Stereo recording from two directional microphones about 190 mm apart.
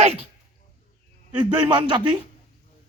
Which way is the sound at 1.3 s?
25° right (ahead or behind).